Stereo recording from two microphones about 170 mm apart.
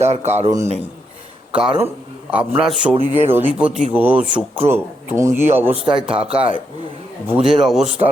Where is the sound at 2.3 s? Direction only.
5° right (ahead or behind).